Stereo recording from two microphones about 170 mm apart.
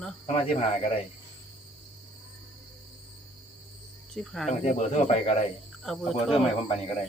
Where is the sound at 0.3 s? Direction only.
40° left (ahead or behind).